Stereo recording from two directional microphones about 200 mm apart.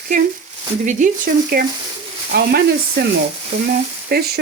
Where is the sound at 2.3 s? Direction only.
55° right (ahead or behind).